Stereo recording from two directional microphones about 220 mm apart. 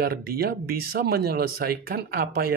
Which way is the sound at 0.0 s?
45° right (ahead or behind).